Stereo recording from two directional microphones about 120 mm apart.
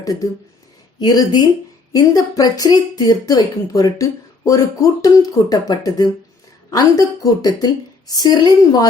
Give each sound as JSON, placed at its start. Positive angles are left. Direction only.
{"t": 0.0, "sound": "speech", "side_deg": 30}